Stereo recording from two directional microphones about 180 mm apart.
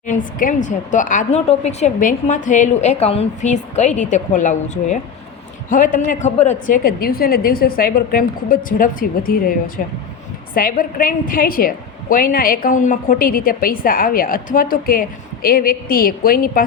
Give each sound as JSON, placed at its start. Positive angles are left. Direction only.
{"t": 0.1, "sound": "a woman's voice", "side_deg": 50}